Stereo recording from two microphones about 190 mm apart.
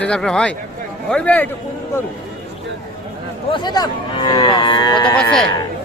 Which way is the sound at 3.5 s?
20° left (ahead or behind).